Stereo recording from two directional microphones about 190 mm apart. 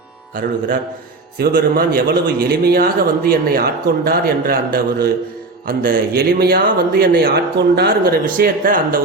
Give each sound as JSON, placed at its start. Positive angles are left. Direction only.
{"t": 1.4, "sound": "a man's voice", "side_deg": -55}